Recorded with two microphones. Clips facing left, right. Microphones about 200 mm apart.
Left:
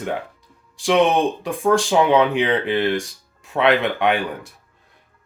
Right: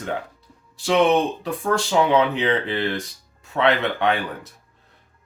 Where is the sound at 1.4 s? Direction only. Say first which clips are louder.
Left 5 dB; 15° left (ahead or behind).